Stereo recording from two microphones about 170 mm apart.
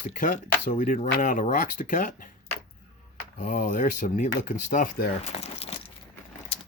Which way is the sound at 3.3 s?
45° left (ahead or behind).